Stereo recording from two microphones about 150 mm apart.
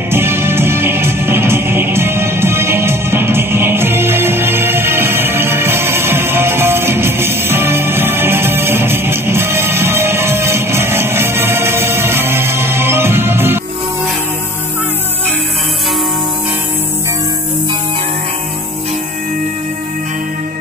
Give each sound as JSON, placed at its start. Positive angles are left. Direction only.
{"t": 0.1, "sound": "music", "side_deg": -15}